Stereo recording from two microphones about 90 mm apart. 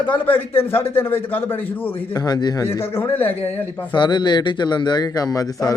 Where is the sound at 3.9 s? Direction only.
55° left (ahead or behind).